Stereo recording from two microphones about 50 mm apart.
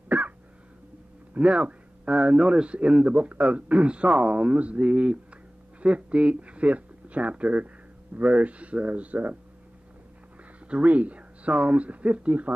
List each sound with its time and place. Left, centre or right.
1.3 s speech: right
10.7 s speech: right